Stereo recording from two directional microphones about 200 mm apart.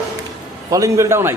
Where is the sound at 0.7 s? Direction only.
15° right (ahead or behind).